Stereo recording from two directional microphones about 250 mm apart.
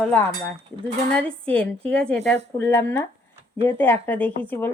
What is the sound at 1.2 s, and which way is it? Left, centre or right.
A woman's voice, centre.